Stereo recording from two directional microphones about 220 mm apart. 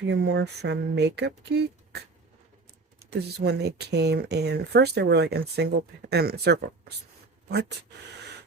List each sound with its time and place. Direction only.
0.0 s speech: 50° right (ahead or behind)
3.1 s speech: 45° right (ahead or behind)